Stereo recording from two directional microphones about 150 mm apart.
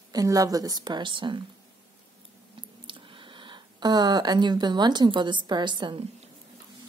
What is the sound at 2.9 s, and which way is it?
Speech, 35° right (ahead or behind).